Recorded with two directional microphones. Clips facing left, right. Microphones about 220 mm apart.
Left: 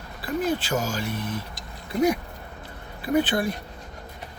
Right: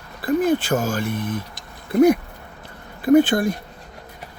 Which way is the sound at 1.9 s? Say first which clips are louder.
Right 8 dB; 55° right (ahead or behind).